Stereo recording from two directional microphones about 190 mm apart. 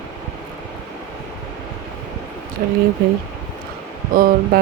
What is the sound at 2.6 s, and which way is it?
Speech, 55° right (ahead or behind).